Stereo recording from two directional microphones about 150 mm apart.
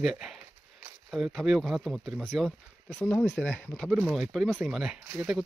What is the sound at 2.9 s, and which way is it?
Speech, 15° left (ahead or behind).